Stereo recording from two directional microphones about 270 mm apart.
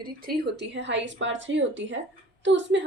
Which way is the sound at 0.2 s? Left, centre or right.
Right.